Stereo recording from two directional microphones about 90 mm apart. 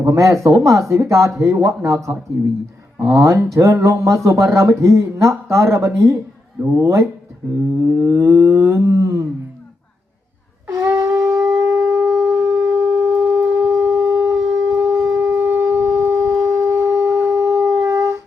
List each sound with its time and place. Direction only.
0.0 s speech: 35° right (ahead or behind)
3.2 s speech: 35° right (ahead or behind)
10.7 s shofar: 35° right (ahead or behind)